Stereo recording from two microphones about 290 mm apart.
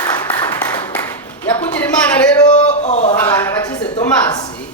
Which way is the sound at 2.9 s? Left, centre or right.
Left.